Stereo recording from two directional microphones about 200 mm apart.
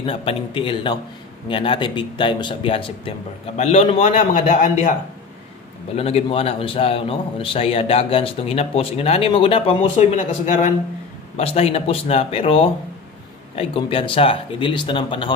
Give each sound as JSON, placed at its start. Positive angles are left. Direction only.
{"t": 0.0, "sound": "a man's voice", "side_deg": 30}
{"t": 5.9, "sound": "a man's voice", "side_deg": 30}